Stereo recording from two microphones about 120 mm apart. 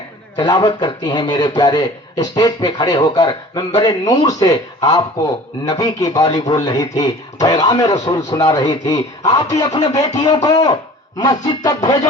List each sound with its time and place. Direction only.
0.3 s a man's voice: 35° left (ahead or behind)